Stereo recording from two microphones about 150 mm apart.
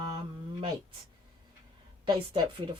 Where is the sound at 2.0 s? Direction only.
30° right (ahead or behind).